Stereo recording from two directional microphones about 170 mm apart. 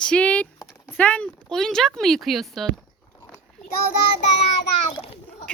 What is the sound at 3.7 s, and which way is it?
Child singing, 65° left (ahead or behind).